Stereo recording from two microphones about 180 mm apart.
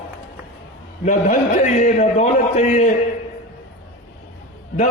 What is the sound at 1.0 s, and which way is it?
A man's voice, 40° left (ahead or behind).